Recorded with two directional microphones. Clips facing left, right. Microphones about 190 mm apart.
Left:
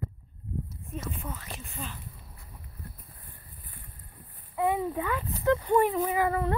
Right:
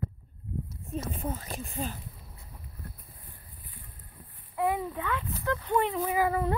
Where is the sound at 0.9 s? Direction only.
35° right (ahead or behind).